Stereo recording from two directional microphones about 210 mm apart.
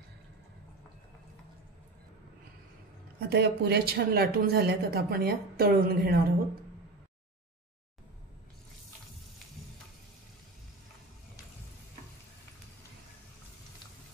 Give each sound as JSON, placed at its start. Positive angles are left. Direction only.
{"t": 3.2, "sound": "speech", "side_deg": -50}